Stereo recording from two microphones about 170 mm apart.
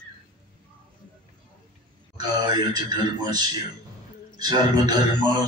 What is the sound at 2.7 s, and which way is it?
A man's voice, 25° right (ahead or behind).